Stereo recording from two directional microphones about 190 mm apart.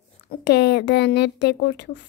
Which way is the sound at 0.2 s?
60° left (ahead or behind).